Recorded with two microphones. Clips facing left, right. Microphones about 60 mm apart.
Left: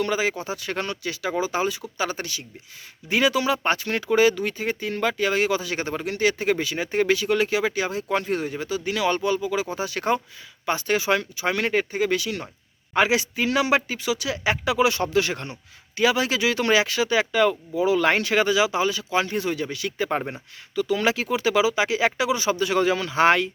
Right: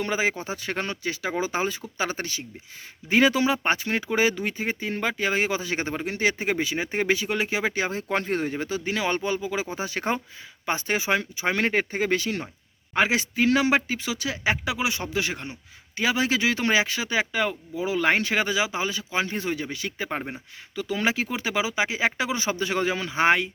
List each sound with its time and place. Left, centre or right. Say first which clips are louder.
0.0 s speech: left 2 dB; right
20.1 s speech: left 5 dB; centre
20.7 s speech: left 3 dB; right